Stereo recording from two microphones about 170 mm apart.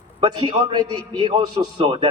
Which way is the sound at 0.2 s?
25° right (ahead or behind).